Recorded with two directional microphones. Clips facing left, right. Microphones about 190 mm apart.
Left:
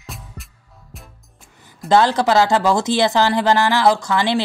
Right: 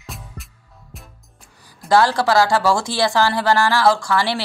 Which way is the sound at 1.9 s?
20° left (ahead or behind).